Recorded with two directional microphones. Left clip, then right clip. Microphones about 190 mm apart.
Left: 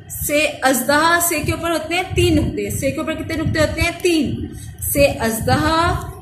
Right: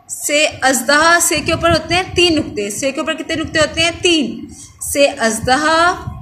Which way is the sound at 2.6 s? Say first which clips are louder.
Right 3 dB; 30° right (ahead or behind).